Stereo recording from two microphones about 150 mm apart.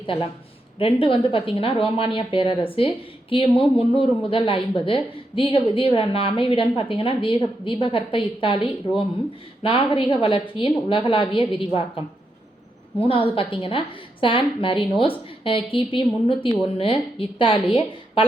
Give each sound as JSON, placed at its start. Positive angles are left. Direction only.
{"t": 0.0, "sound": "speech", "side_deg": 35}
{"t": 13.3, "sound": "speech", "side_deg": 35}